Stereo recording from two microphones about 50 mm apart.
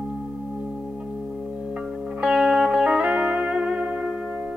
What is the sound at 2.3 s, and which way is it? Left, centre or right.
Music, centre.